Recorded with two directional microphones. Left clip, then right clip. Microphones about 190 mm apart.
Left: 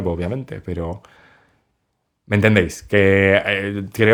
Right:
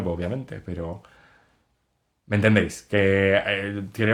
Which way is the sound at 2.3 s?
40° left (ahead or behind).